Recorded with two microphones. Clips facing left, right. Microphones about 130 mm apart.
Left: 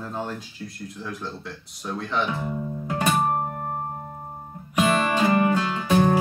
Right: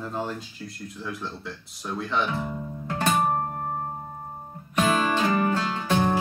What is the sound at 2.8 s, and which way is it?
Music, 10° left (ahead or behind).